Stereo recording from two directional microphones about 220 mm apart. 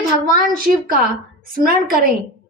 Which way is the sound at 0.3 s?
40° right (ahead or behind).